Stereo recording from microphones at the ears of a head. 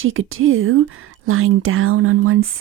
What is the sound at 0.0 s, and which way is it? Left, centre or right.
Speech, right.